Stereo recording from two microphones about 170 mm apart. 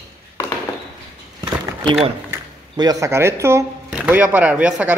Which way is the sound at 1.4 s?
25° right (ahead or behind).